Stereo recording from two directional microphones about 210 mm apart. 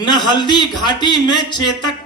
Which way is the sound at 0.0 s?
20° left (ahead or behind).